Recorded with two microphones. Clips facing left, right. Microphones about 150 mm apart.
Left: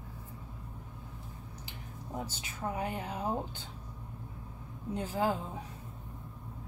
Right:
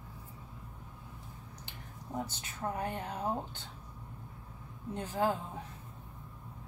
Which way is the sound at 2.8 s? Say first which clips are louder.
Left 1 dB; 5° left (ahead or behind).